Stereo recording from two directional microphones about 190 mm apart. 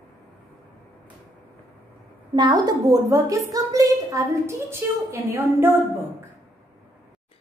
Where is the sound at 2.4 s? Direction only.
20° right (ahead or behind).